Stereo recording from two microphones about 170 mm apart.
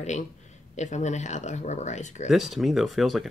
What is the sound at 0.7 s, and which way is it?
Speech, 45° left (ahead or behind).